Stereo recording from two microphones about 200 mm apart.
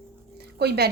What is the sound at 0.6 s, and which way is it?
Speech, 55° right (ahead or behind).